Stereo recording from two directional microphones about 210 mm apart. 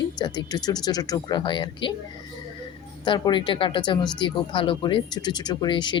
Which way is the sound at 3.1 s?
20° left (ahead or behind).